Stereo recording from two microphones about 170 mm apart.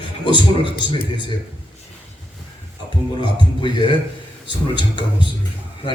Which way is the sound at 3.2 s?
25° left (ahead or behind).